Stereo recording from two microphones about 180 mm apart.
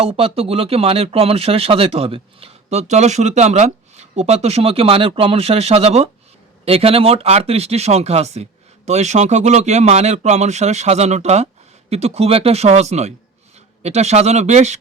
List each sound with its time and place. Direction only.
0.0 s speech: 35° right (ahead or behind)